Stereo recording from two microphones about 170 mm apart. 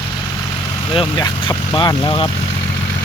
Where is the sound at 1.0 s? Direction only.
25° left (ahead or behind).